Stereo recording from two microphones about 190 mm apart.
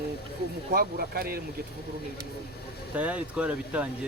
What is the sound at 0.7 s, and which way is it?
Speech, 50° right (ahead or behind).